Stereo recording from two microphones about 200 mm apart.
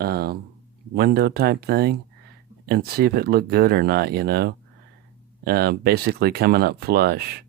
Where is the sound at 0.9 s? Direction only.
50° right (ahead or behind).